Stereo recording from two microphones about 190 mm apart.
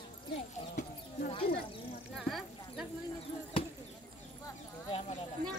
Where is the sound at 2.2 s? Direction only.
Centre (ahead or behind).